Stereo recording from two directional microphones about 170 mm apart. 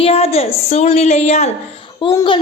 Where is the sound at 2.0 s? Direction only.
25° left (ahead or behind).